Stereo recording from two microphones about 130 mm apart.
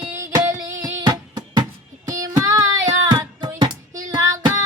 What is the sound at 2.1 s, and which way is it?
Child singing, 25° right (ahead or behind).